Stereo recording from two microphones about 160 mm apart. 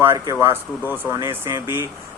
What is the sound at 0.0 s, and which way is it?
Speech, 15° right (ahead or behind).